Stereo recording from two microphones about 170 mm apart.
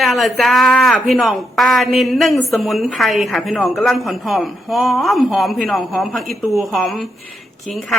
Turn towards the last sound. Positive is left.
turn(degrees=0)  # may be behind; listen again after turning